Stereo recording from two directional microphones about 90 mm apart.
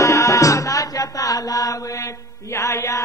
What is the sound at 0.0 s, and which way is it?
Mantra, 35° left (ahead or behind).